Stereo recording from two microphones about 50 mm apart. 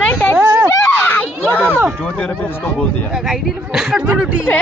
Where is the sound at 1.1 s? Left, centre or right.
Left.